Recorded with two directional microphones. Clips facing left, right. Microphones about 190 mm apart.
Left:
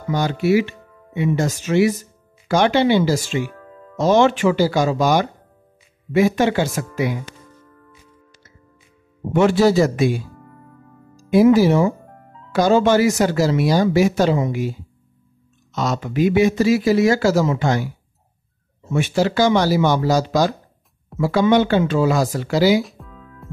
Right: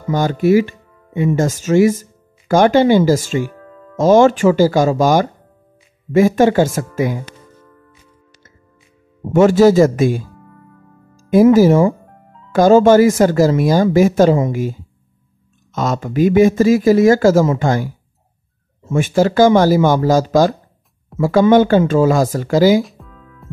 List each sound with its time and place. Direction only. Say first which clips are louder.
0.1 s speech: right 4 dB; 45° right (ahead or behind)
9.3 s speech: right 5 dB; 45° right (ahead or behind)
22.8 s music: even; centre (ahead or behind)